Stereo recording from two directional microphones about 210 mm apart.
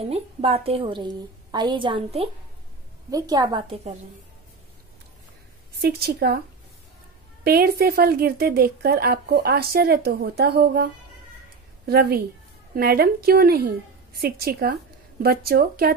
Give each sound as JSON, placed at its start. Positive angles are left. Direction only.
{"t": 0.0, "sound": "a woman's voice", "side_deg": -30}
{"t": 5.8, "sound": "a woman's voice", "side_deg": -50}
{"t": 7.4, "sound": "a woman's voice", "side_deg": -45}